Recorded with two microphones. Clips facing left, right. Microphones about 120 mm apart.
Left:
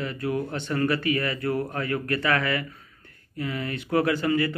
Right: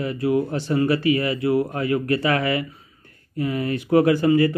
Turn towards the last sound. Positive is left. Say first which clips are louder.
# right 7 dB
turn(degrees=-35)  # may be behind; listen again after turning